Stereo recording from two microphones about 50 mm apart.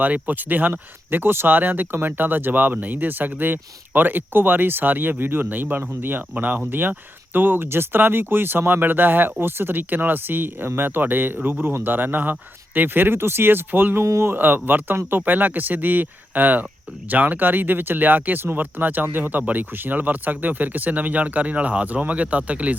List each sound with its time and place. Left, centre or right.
0.0 s speech: right
14.0 s speech: right
14.3 s speech: right